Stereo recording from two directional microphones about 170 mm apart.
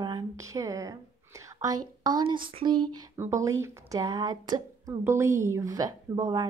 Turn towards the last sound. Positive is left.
turn(degrees=-25)  # may be behind; listen again after turning